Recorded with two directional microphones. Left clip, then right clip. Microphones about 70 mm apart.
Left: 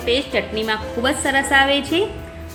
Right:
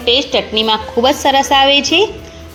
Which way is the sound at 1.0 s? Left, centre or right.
Right.